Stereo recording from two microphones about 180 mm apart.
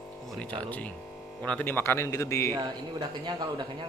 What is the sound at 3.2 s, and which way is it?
Speech, 25° right (ahead or behind).